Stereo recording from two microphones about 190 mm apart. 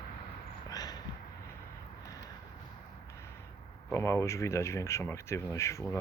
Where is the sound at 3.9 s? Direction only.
15° left (ahead or behind).